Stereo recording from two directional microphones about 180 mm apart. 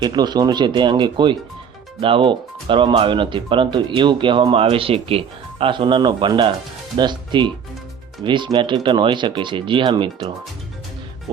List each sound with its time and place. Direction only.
0.0 s speech: 25° right (ahead or behind)